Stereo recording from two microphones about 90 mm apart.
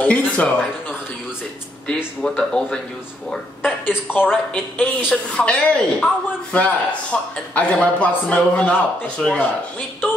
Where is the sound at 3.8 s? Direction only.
20° left (ahead or behind).